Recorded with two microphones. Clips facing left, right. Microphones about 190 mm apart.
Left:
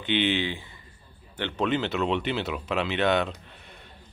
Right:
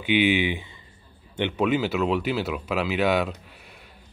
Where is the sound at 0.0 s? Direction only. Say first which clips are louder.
Right 4 dB; 10° right (ahead or behind).